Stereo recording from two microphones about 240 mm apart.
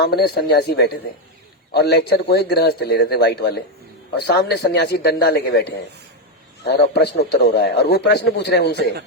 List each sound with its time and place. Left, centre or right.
0.0 s a man's voice: left